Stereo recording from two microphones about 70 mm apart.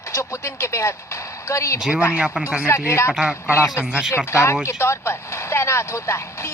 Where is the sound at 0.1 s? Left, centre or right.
Left.